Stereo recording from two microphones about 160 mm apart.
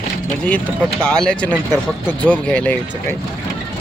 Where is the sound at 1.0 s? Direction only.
5° left (ahead or behind).